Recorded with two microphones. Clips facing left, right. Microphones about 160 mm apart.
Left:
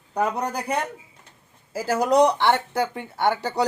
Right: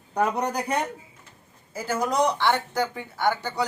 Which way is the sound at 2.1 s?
30° left (ahead or behind).